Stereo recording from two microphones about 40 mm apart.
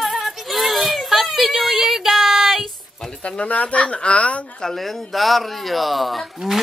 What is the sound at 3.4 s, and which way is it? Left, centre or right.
Speech, left.